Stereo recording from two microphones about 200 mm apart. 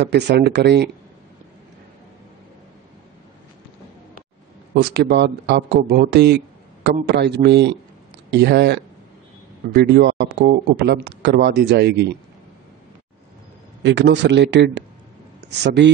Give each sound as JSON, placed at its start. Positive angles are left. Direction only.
{"t": 0.0, "sound": "a man's voice", "side_deg": -60}
{"t": 4.9, "sound": "a man's voice", "side_deg": -55}
{"t": 13.8, "sound": "a man's voice", "side_deg": -60}